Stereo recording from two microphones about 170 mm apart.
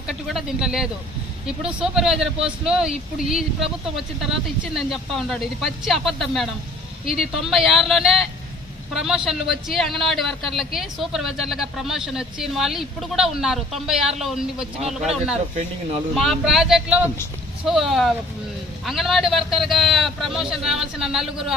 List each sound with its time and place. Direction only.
0.1 s speech: centre (ahead or behind)
7.0 s speech: 55° left (ahead or behind)
7.4 s speech: centre (ahead or behind)